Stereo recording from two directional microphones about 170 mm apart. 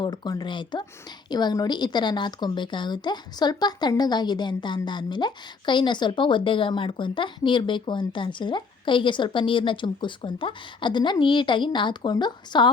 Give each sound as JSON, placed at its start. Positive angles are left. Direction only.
{"t": 0.0, "sound": "speech", "side_deg": 25}